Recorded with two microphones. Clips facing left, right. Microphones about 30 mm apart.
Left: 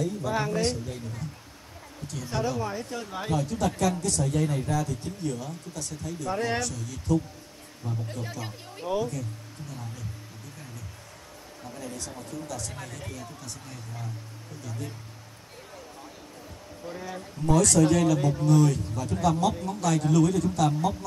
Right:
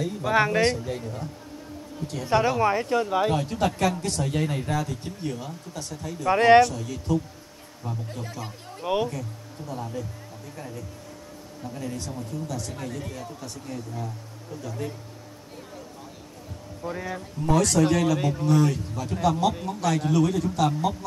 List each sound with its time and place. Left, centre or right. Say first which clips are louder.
0.0 s speech: right 5 dB; right
2.2 s speech: right 8 dB; right
6.2 s speech: right 13 dB; right
6.6 s speech: right 11 dB; right
8.1 s speech: right 1 dB; centre
8.8 s speech: right 3 dB; right
12.4 s a man's voice: right 4 dB; centre
13.1 s a man's voice: right 4 dB; centre
16.9 s speech: right 4 dB; right
17.5 s a man's voice: even; centre